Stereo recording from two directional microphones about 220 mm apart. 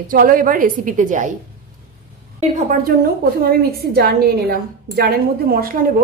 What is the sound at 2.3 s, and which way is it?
Speech, 35° right (ahead or behind).